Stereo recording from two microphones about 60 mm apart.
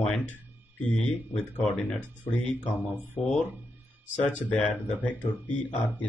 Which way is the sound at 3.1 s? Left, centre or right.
Left.